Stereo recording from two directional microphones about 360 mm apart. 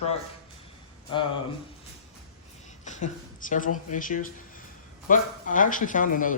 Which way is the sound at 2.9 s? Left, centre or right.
Centre.